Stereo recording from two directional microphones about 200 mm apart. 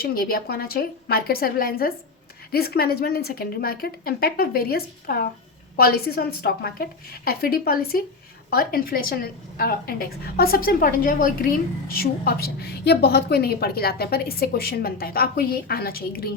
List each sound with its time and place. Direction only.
0.0 s a woman's voice: 50° left (ahead or behind)